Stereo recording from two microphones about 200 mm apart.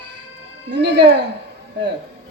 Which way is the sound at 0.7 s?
55° right (ahead or behind).